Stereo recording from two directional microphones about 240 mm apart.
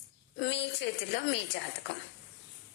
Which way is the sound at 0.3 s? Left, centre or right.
Left.